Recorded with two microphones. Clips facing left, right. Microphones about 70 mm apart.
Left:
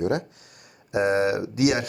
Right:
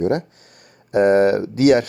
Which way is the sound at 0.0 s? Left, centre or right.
Right.